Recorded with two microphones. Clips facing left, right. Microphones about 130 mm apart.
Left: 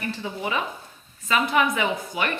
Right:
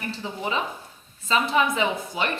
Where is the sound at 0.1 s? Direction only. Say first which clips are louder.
Right 1 dB; 25° right (ahead or behind).